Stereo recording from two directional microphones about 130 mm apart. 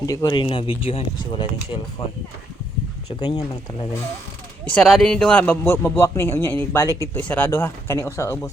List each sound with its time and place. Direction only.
0.0 s speech: 30° left (ahead or behind)
3.2 s speech: 35° left (ahead or behind)
4.6 s speech: 5° left (ahead or behind); by 7.2 s 25° left (ahead or behind)
7.2 s speech: 10° left (ahead or behind)